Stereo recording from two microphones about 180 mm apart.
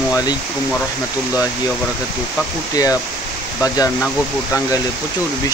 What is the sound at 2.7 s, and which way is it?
Speech, 20° left (ahead or behind).